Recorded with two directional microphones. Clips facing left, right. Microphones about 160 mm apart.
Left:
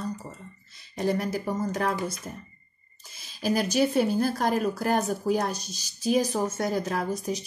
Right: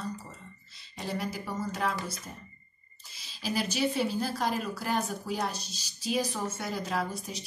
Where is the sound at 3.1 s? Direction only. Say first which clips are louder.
Left 6 dB; 50° left (ahead or behind).